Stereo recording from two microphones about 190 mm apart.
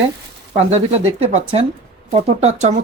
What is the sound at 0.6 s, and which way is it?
Speech, 35° right (ahead or behind).